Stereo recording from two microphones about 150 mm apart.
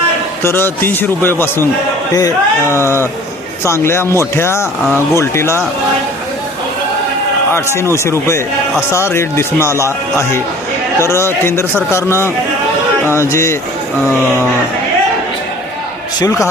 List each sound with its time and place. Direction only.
0.4 s a man's voice: 15° left (ahead or behind)
7.8 s a man's voice: 20° left (ahead or behind)
16.2 s speech: 20° left (ahead or behind)